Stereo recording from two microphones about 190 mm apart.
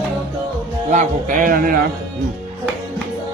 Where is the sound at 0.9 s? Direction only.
40° right (ahead or behind).